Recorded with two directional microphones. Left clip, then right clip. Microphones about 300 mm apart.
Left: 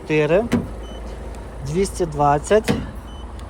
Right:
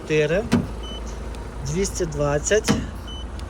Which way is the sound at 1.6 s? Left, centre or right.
Centre.